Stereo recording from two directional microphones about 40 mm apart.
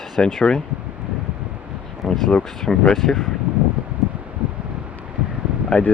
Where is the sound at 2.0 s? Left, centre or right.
Centre.